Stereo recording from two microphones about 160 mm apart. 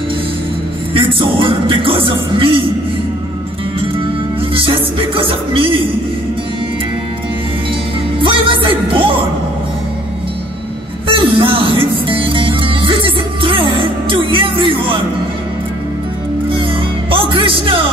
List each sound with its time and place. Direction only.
0.9 s music: 30° right (ahead or behind)
4.6 s music: 35° right (ahead or behind)
8.2 s music: 30° right (ahead or behind)
11.1 s music: 35° right (ahead or behind)
17.1 s music: 35° right (ahead or behind)